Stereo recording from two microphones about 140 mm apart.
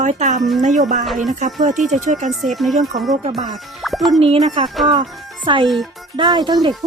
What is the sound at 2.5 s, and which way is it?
Speech, centre (ahead or behind).